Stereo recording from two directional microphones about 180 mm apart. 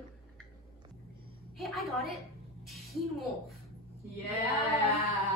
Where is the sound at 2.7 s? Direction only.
Centre (ahead or behind).